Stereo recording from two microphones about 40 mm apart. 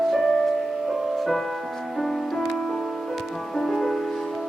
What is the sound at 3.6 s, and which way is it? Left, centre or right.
Music, centre.